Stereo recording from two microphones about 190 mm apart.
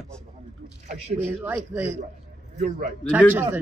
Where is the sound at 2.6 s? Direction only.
45° right (ahead or behind).